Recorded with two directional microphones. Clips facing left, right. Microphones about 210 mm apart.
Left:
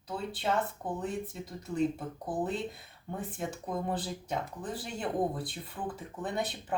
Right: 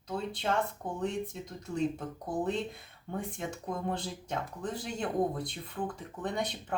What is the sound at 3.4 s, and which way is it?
Speech, 5° left (ahead or behind).